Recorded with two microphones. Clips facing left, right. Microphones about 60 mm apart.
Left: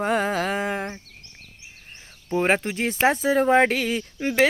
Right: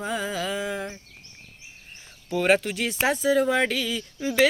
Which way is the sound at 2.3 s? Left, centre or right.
Left.